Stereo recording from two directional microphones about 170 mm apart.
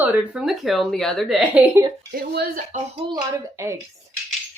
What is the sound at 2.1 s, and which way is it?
Speech, 65° right (ahead or behind).